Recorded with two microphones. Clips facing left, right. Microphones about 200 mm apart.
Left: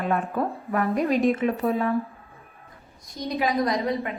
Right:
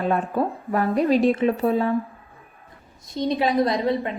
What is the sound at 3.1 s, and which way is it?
A woman's voice, 30° right (ahead or behind).